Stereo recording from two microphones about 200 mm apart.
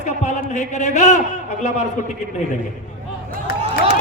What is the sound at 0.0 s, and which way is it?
A man's voice, 35° left (ahead or behind).